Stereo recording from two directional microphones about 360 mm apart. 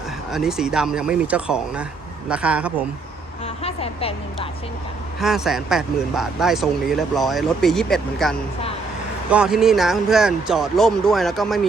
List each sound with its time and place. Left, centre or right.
0.3 s speech: centre
3.4 s speech: centre
5.2 s speech: centre